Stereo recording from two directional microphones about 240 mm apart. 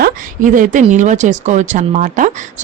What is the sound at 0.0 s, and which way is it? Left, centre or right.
Speech, right.